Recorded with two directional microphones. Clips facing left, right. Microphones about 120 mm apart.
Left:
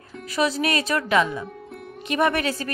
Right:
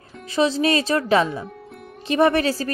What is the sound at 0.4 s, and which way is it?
A woman's voice, 30° right (ahead or behind).